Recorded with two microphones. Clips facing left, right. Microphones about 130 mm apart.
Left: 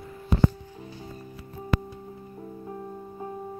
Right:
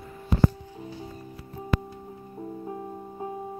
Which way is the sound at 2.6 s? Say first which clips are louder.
Right 2 dB; 20° right (ahead or behind).